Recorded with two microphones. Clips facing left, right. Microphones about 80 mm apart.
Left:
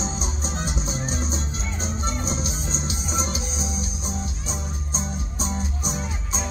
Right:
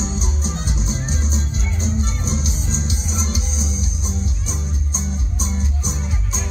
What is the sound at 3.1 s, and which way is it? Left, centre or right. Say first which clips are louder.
Music: right 1 dB; left.